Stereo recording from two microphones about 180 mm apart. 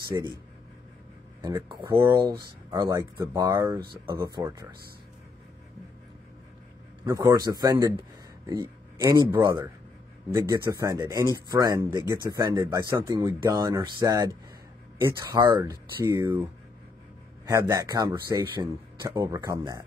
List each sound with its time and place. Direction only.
0.1 s speech: 20° right (ahead or behind)
1.9 s speech: 15° right (ahead or behind)
7.1 s speech: 20° right (ahead or behind)
17.5 s speech: 20° right (ahead or behind)